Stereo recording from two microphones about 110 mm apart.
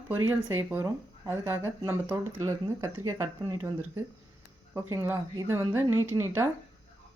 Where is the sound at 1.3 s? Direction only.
20° right (ahead or behind).